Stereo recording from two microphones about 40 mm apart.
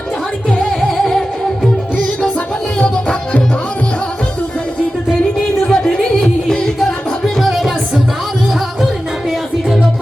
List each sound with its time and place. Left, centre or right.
0.6 s music: centre
2.7 s music: left
5.6 s music: centre
7.3 s music: centre